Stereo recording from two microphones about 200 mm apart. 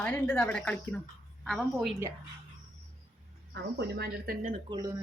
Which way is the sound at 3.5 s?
55° right (ahead or behind).